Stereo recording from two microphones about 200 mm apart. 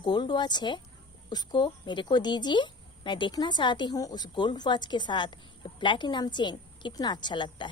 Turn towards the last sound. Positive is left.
turn(degrees=20)  # may be behind; listen again after turning